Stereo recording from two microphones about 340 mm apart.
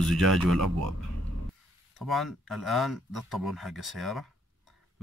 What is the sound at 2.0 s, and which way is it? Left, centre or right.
Speech, centre.